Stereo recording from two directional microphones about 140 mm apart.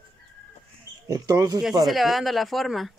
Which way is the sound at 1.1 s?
25° right (ahead or behind).